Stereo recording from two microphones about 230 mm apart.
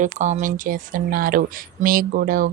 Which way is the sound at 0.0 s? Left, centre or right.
Right.